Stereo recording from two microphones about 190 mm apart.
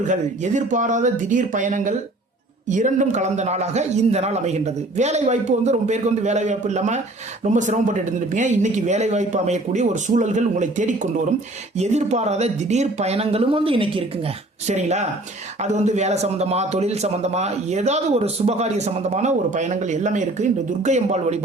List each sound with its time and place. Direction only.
0.1 s a man's voice: 40° right (ahead or behind)